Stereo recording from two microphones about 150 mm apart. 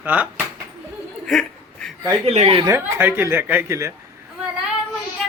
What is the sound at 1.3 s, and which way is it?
Chuckle, 5° left (ahead or behind).